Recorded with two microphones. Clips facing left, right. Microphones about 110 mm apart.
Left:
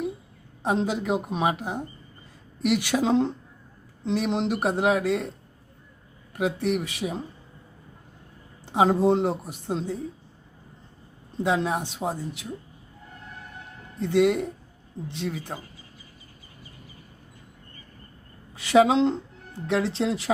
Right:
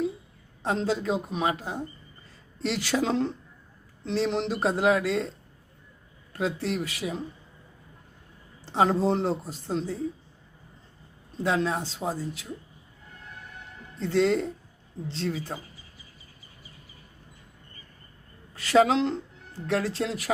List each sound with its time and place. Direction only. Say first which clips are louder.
0.6 s speech: left 2 dB; 15° left (ahead or behind)
6.3 s speech: left 3 dB; 15° left (ahead or behind)
8.6 s speech: left 3 dB; 15° left (ahead or behind)
11.4 s speech: left 1 dB; 15° left (ahead or behind)
14.0 s speech: left 2 dB; 15° left (ahead or behind)
18.5 s speech: left 2 dB; 20° left (ahead or behind)